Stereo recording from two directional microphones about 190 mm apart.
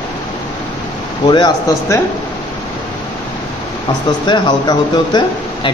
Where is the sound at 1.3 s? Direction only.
20° left (ahead or behind).